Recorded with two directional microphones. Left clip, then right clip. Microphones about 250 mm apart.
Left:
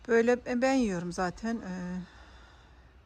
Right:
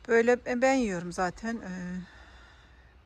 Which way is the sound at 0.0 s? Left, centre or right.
Centre.